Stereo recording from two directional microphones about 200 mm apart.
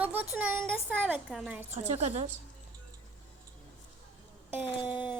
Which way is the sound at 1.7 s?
35° right (ahead or behind).